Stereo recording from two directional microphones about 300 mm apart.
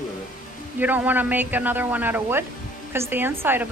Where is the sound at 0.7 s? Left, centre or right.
Centre.